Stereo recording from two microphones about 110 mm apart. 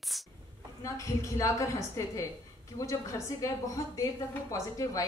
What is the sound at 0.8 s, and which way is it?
A woman's voice, 30° left (ahead or behind).